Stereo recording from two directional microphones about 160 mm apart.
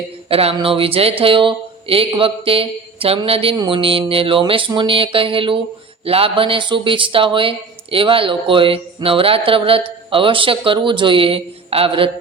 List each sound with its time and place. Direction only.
0.3 s speech: 35° right (ahead or behind)